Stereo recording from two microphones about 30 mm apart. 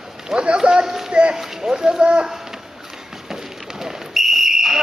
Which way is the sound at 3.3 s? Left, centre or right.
Centre.